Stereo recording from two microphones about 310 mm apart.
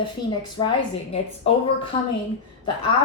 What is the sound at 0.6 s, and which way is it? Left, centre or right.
Speech, centre.